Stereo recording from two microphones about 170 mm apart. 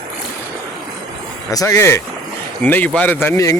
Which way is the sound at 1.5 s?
20° left (ahead or behind).